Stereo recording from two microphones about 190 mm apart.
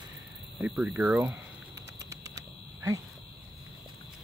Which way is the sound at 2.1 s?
15° right (ahead or behind).